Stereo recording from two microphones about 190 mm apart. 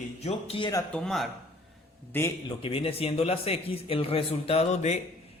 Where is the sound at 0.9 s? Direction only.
5° left (ahead or behind).